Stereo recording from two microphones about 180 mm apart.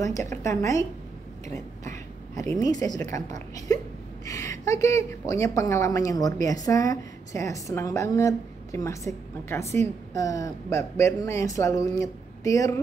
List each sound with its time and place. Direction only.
0.0 s speech: 15° left (ahead or behind)
2.6 s a woman's voice: 20° left (ahead or behind)